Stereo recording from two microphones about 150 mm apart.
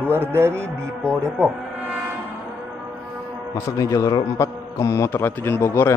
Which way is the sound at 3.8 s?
20° left (ahead or behind).